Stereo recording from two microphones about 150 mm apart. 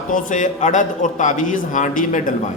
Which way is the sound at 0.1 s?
55° left (ahead or behind).